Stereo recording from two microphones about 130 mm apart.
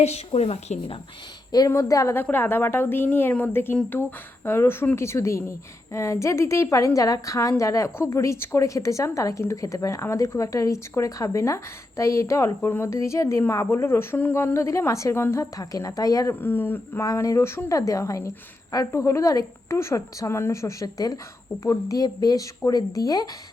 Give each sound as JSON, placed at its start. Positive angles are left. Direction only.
{"t": 0.3, "sound": "a woman's voice", "side_deg": 55}
{"t": 1.5, "sound": "a woman's voice", "side_deg": 25}
{"t": 16.3, "sound": "a woman's voice", "side_deg": 15}